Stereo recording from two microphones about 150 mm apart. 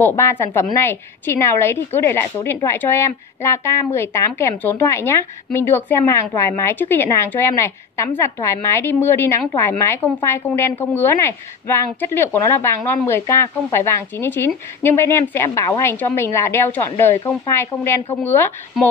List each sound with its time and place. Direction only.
0.0 s a woman's voice: 15° left (ahead or behind)